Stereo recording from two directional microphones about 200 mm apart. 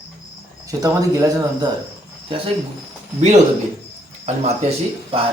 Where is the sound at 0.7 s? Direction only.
15° right (ahead or behind).